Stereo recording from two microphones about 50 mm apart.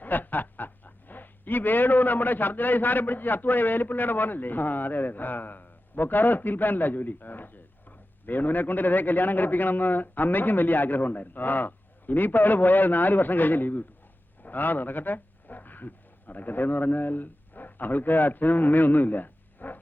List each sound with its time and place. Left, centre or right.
0.0 s a man's voice: left